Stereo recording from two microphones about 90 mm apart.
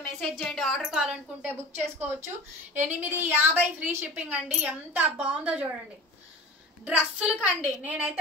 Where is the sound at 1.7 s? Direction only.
25° right (ahead or behind).